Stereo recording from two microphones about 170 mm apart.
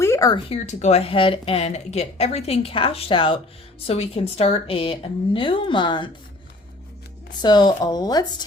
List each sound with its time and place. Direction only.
0.0 s a sound: 20° left (ahead or behind)
0.3 s speech: 35° left (ahead or behind)
7.4 s speech: 25° left (ahead or behind)